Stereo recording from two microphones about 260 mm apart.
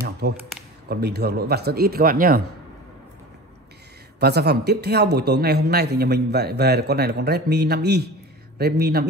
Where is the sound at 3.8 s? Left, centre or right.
Right.